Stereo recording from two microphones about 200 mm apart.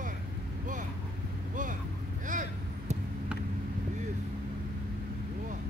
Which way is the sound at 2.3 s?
40° right (ahead or behind).